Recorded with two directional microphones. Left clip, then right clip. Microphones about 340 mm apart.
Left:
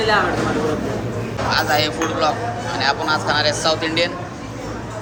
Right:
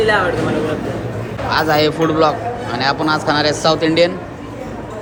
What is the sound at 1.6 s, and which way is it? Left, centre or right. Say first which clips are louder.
Speech: right 6 dB; centre.